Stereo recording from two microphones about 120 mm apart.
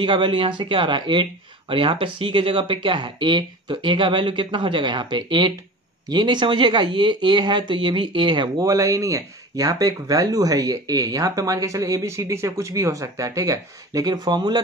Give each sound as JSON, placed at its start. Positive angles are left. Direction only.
{"t": 0.0, "sound": "speech", "side_deg": -45}
{"t": 8.6, "sound": "speech", "side_deg": -25}